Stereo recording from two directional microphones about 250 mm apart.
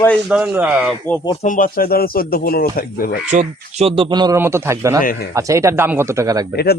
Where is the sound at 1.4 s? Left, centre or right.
Left.